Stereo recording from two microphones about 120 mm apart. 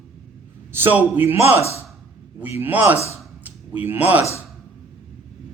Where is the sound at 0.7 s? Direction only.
15° right (ahead or behind).